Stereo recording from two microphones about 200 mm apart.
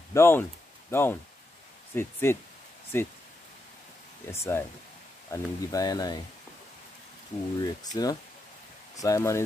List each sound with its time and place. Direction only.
0.1 s speech: 10° left (ahead or behind)
4.3 s speech: 10° left (ahead or behind)
7.6 s speech: 20° left (ahead or behind)